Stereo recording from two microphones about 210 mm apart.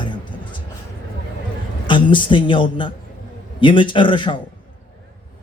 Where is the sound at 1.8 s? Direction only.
25° left (ahead or behind).